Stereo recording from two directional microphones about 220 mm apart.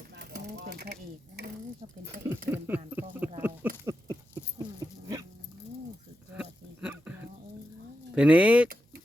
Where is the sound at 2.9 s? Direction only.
10° right (ahead or behind).